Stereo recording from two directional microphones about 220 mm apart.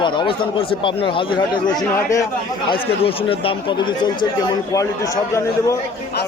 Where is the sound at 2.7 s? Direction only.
25° left (ahead or behind).